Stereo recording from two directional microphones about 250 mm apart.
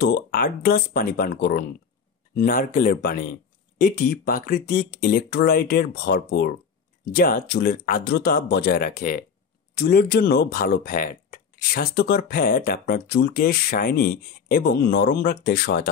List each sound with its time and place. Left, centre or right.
0.0 s speech: left